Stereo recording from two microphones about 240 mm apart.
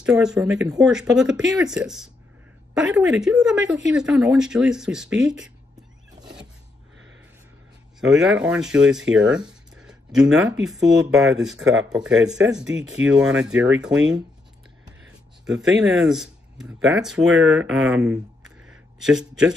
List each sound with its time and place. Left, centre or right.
0.0 s speech: centre
3.2 s speech: centre
8.0 s speech: centre
12.6 s speech: right
13.0 s speech: centre
15.4 s speech: centre